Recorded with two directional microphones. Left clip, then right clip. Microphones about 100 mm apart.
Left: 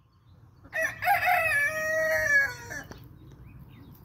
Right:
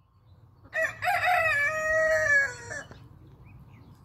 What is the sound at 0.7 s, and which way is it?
Crowing, 20° right (ahead or behind).